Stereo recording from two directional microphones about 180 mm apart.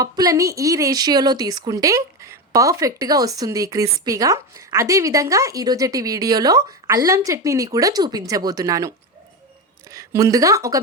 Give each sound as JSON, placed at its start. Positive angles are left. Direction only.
{"t": 0.0, "sound": "a woman's voice", "side_deg": -20}
{"t": 9.9, "sound": "a woman's voice", "side_deg": -15}